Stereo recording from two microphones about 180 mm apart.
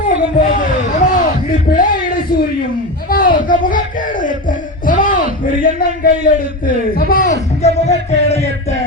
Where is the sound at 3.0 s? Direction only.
50° left (ahead or behind).